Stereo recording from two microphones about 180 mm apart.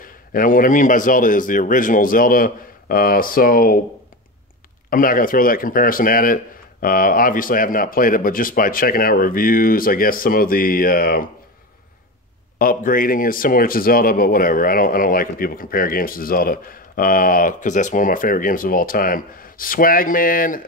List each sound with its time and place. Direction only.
0.0 s speech: 50° left (ahead or behind)
4.8 s speech: 50° left (ahead or behind)
12.5 s speech: 50° left (ahead or behind)